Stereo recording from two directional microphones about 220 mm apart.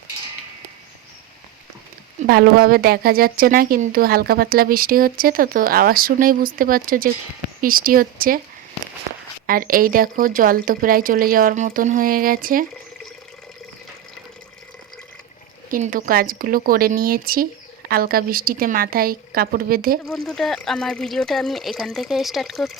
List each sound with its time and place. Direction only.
2.2 s speech: 45° right (ahead or behind)
9.5 s speech: 40° right (ahead or behind)
15.7 s speech: 40° right (ahead or behind)
20.1 s speech: centre (ahead or behind)